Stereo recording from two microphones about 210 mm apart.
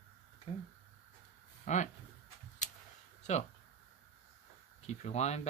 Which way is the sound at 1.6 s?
35° left (ahead or behind).